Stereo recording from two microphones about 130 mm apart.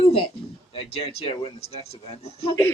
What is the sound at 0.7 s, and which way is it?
Speech, 45° left (ahead or behind).